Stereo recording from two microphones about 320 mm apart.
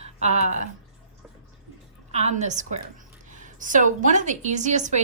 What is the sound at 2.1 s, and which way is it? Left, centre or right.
A woman's voice, right.